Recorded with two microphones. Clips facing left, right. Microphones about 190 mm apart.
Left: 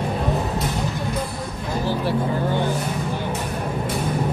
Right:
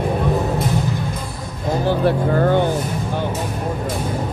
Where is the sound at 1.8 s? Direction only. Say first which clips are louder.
Right 5 dB; 60° right (ahead or behind).